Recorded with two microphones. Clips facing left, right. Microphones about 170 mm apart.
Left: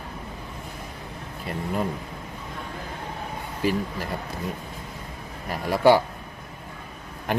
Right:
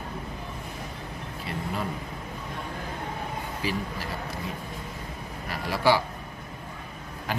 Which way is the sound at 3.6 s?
50° left (ahead or behind).